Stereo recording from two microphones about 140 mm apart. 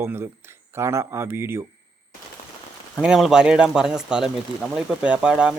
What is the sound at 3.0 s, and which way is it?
Speech, 5° right (ahead or behind).